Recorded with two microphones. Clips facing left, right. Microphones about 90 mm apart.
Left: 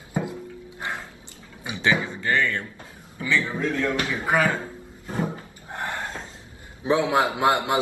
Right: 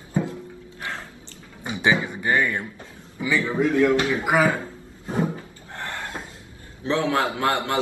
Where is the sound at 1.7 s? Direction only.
20° right (ahead or behind).